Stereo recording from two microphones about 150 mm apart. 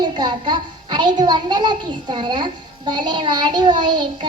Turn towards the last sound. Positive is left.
turn(degrees=-30)  # may be behind; listen again after turning